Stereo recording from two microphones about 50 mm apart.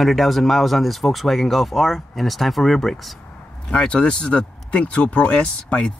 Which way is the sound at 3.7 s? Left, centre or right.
Centre.